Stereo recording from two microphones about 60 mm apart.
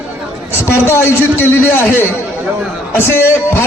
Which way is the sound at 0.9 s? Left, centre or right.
Left.